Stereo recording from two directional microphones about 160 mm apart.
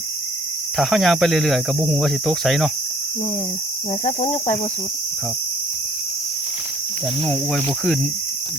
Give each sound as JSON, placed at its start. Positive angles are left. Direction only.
{"t": 0.8, "sound": "speech", "side_deg": 0}
{"t": 4.0, "sound": "speech", "side_deg": 45}
{"t": 7.3, "sound": "speech", "side_deg": 5}